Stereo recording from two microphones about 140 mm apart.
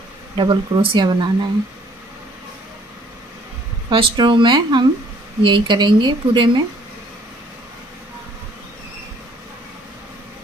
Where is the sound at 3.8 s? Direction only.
35° right (ahead or behind).